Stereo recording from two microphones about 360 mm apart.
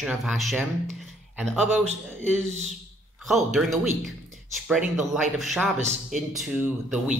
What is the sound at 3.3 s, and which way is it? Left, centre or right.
Speech, centre.